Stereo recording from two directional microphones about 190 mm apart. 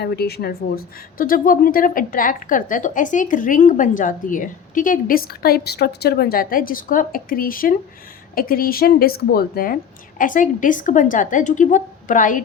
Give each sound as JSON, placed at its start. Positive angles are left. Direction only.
{"t": 0.0, "sound": "speech", "side_deg": 55}